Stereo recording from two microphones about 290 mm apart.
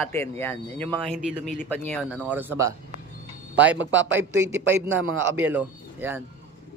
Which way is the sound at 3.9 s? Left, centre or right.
Right.